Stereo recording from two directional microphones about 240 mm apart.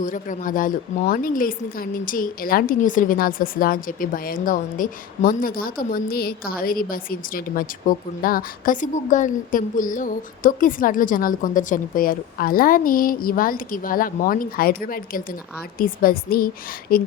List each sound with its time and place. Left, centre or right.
0.0 s speech: left